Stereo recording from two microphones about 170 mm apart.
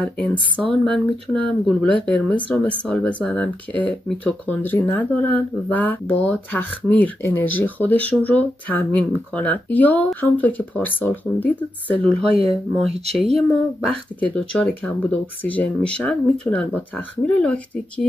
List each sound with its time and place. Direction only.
0.0 s speech: 10° left (ahead or behind)
12.2 s speech: 35° right (ahead or behind)
12.7 s speech: centre (ahead or behind)